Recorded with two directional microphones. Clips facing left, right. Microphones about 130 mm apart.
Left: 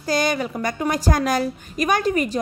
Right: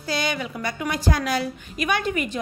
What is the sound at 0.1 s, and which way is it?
A woman's voice, 45° left (ahead or behind).